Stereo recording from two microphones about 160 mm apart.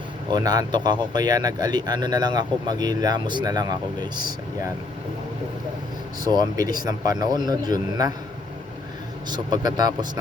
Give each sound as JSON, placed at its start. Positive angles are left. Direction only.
{"t": 0.3, "sound": "speech", "side_deg": -25}
{"t": 6.2, "sound": "speech", "side_deg": -25}
{"t": 9.3, "sound": "speech", "side_deg": -25}